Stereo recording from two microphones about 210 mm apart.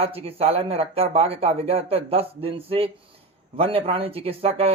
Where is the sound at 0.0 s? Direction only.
30° right (ahead or behind).